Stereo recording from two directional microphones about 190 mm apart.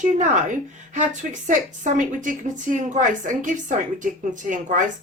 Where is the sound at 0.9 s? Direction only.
40° right (ahead or behind).